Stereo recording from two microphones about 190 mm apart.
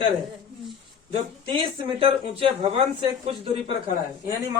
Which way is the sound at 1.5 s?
30° right (ahead or behind).